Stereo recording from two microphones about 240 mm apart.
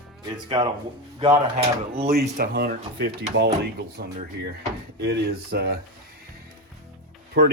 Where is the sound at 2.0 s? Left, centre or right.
Right.